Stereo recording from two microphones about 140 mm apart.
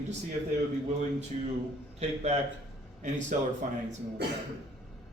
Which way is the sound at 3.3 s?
70° right (ahead or behind).